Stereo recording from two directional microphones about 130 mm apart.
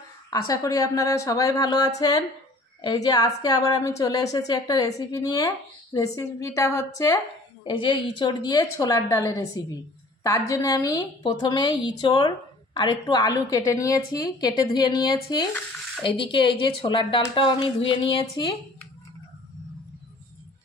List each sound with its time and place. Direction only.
0.3 s a woman's voice: 25° left (ahead or behind)
7.6 s a woman's voice: 40° left (ahead or behind)